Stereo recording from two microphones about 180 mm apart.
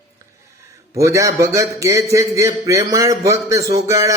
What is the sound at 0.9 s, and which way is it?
Speech, 15° right (ahead or behind).